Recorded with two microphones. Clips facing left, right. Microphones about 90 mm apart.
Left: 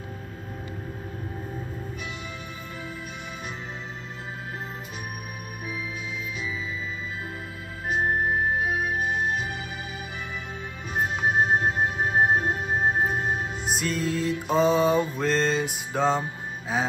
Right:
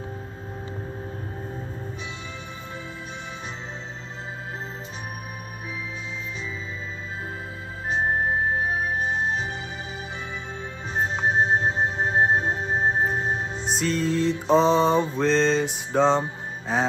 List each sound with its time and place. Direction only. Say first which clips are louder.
8.5 s music: right 1 dB; 30° right (ahead or behind)
11.0 s music: right 1 dB; 30° right (ahead or behind)
13.7 s mantra: right 3 dB; 5° left (ahead or behind)